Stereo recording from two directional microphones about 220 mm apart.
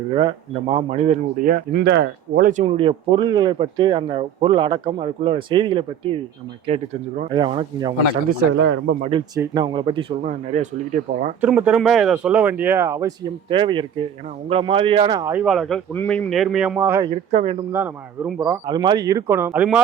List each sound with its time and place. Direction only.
0.1 s speech: 20° right (ahead or behind)
8.6 s speech: 55° right (ahead or behind)
9.0 s speech: 25° right (ahead or behind)
11.3 s a man's voice: 5° right (ahead or behind)
17.3 s speech: 30° right (ahead or behind)
17.7 s speech: 10° right (ahead or behind)
18.6 s speech: 20° right (ahead or behind)